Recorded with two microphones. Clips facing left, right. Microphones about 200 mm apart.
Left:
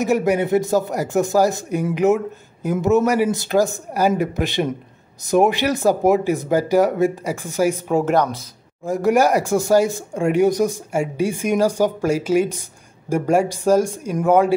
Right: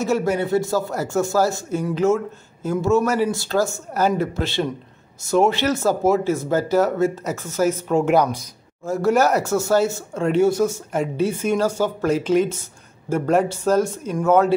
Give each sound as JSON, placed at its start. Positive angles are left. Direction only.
{"t": 0.0, "sound": "speech", "side_deg": 15}
{"t": 8.0, "sound": "speech", "side_deg": 0}
{"t": 8.8, "sound": "speech", "side_deg": 15}